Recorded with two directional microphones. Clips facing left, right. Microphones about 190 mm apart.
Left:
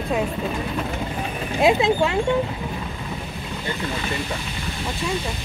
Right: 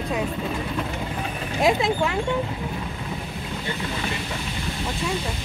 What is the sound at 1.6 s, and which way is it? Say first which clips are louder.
Speech: left 3 dB; 20° left (ahead or behind).